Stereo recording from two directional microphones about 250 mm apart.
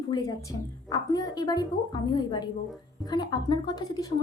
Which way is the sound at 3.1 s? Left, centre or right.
Centre.